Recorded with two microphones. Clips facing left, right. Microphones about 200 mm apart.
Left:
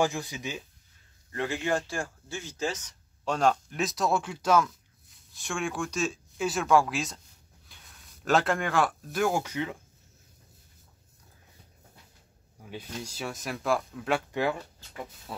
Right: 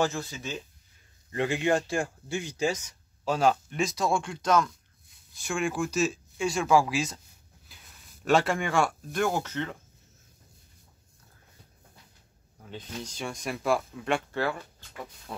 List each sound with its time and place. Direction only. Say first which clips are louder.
0.0 s speech: left 1 dB; 15° left (ahead or behind)
1.3 s speech: right 3 dB; 20° right (ahead or behind); by 9.8 s 10° left (ahead or behind)
12.5 s speech: even; 10° left (ahead or behind)
14.3 s speech: left 1 dB; 15° left (ahead or behind)